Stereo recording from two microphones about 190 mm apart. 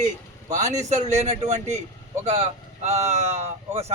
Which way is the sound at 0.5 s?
40° right (ahead or behind).